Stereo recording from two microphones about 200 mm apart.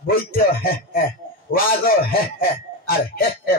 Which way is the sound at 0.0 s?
45° left (ahead or behind).